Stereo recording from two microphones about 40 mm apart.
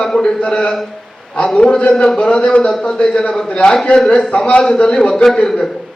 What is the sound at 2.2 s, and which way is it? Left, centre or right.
Speech, left.